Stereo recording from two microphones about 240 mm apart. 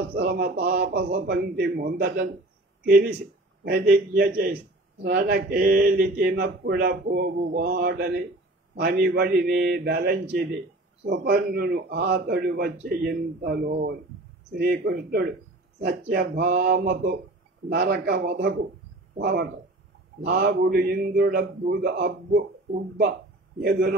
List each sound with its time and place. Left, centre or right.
0.2 s a man's voice: right